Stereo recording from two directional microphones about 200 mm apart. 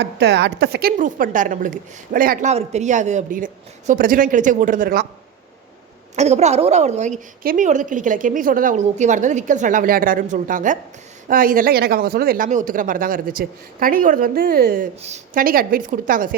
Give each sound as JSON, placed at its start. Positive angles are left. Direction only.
{"t": 0.0, "sound": "a woman's voice", "side_deg": -60}
{"t": 6.1, "sound": "a woman's voice", "side_deg": -35}